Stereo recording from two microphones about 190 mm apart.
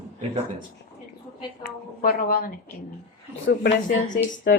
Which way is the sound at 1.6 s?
50° left (ahead or behind).